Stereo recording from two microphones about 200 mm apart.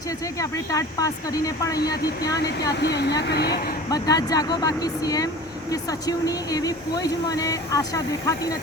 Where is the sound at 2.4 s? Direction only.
55° left (ahead or behind).